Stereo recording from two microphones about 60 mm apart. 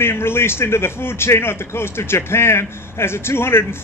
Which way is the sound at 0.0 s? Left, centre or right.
Left.